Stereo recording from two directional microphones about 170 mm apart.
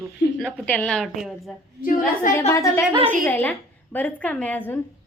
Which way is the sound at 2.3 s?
50° left (ahead or behind).